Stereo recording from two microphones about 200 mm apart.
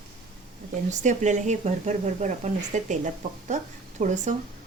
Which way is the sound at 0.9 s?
35° right (ahead or behind).